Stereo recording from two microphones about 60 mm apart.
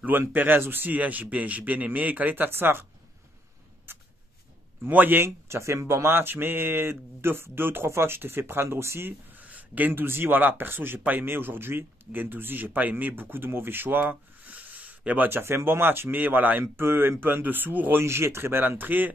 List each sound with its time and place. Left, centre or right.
0.3 s speech: right
3.9 s a sound: right
4.8 s speech: right
5.5 s speech: right
6.0 s speech: right
9.3 s speech: right
15.2 s speech: right
18.0 s speech: right